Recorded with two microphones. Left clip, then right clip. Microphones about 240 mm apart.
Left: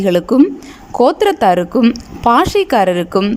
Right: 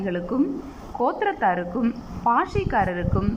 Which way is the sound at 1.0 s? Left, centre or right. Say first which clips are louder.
Left 11 dB; left.